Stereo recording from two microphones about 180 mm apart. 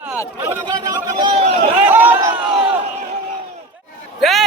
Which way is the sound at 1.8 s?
10° right (ahead or behind).